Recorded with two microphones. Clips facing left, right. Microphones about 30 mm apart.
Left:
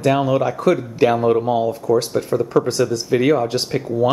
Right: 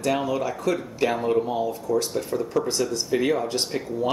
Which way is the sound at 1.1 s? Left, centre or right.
Centre.